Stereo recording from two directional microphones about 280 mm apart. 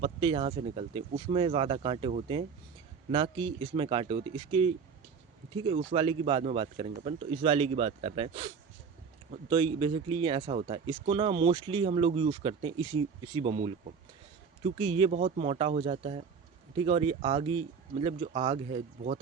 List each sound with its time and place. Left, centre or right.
0.0 s speech: centre